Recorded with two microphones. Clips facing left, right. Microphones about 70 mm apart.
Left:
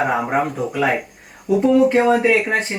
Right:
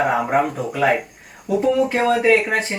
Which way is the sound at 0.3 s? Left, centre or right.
Centre.